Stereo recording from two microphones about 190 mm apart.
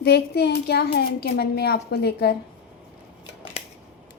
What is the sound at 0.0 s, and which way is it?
Speech, 60° left (ahead or behind).